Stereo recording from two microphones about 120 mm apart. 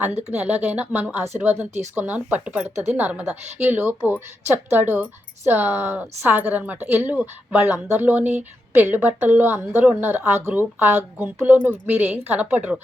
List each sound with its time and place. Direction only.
0.1 s speech: 65° right (ahead or behind)
0.3 s a woman's voice: 10° right (ahead or behind)